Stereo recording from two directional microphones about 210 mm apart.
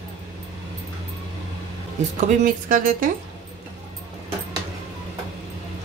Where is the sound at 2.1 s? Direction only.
35° right (ahead or behind).